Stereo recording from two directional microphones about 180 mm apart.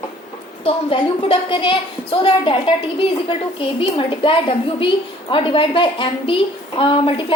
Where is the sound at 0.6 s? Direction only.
30° left (ahead or behind).